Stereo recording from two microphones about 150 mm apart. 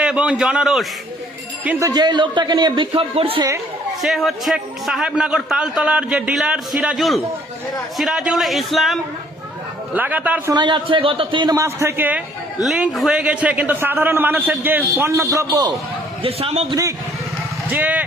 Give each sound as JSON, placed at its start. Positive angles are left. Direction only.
{"t": 0.0, "sound": "a man's voice", "side_deg": -5}
{"t": 1.8, "sound": "a man's voice", "side_deg": -25}
{"t": 4.0, "sound": "a man's voice", "side_deg": 0}
{"t": 10.5, "sound": "a man's voice", "side_deg": -30}
{"t": 11.5, "sound": "a man's voice", "side_deg": -20}
{"t": 16.2, "sound": "a man's voice", "side_deg": -40}
{"t": 17.7, "sound": "a man's voice", "side_deg": -10}